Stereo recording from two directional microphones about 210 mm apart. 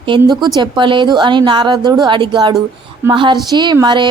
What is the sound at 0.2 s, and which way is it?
Speech, 20° right (ahead or behind).